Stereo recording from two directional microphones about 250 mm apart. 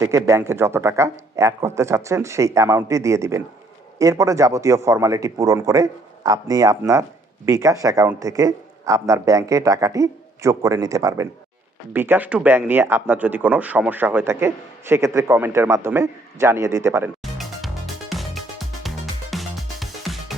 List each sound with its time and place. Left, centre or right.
0.0 s speech: centre
17.3 s music: centre